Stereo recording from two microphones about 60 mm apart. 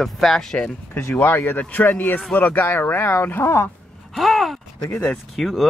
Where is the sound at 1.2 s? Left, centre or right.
Left.